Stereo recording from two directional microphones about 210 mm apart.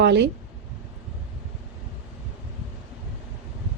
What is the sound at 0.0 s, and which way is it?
Speech, 55° right (ahead or behind).